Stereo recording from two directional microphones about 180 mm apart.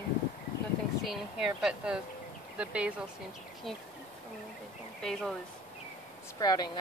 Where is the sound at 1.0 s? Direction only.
5° right (ahead or behind).